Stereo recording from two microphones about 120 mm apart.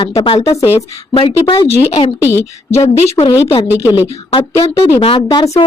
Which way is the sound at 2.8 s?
65° left (ahead or behind).